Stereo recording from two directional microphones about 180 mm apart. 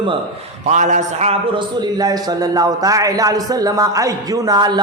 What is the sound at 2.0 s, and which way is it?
A man's voice, 20° right (ahead or behind).